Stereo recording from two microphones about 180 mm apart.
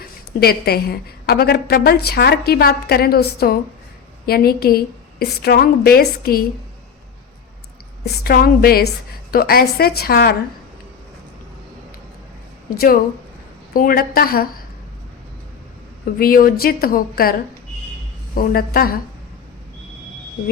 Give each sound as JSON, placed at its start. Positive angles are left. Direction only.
{"t": 0.3, "sound": "a woman's voice", "side_deg": 60}
{"t": 8.2, "sound": "a woman's voice", "side_deg": 55}
{"t": 12.7, "sound": "a woman's voice", "side_deg": 55}
{"t": 16.1, "sound": "a woman's voice", "side_deg": 55}
{"t": 18.3, "sound": "a woman's voice", "side_deg": 55}